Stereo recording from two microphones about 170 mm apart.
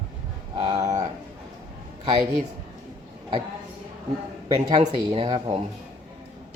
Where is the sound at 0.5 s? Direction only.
20° right (ahead or behind).